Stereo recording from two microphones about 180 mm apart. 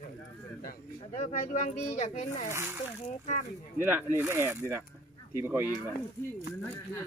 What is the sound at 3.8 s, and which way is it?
Speech, 15° right (ahead or behind).